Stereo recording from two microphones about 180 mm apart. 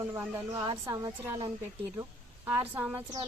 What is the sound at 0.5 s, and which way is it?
Speech, 20° right (ahead or behind).